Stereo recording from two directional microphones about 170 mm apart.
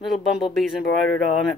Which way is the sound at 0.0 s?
Centre (ahead or behind).